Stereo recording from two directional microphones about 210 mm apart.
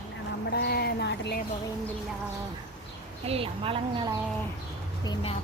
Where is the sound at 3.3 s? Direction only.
25° right (ahead or behind).